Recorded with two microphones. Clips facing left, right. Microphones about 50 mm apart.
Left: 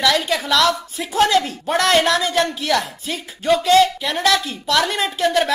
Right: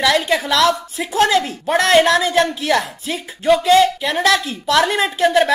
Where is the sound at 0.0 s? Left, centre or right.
Centre.